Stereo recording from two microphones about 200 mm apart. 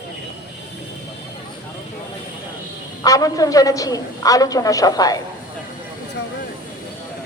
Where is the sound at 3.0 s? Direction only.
15° left (ahead or behind).